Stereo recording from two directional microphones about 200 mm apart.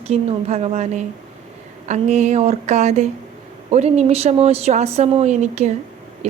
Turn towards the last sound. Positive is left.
turn(degrees=-35)  # may be behind; listen again after turning